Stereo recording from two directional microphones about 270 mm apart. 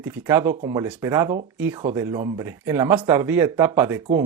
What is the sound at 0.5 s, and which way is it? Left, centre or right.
Speech, centre.